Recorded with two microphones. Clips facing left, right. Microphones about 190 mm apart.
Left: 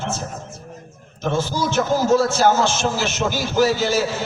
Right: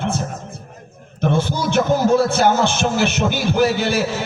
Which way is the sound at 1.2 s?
60° right (ahead or behind).